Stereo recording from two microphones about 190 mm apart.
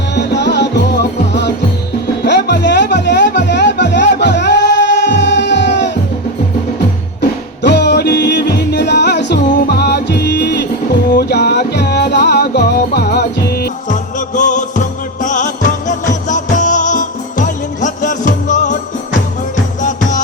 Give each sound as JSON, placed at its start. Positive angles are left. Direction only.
{"t": 0.2, "sound": "music", "side_deg": 65}
{"t": 7.7, "sound": "music", "side_deg": 65}
{"t": 19.8, "sound": "music", "side_deg": 40}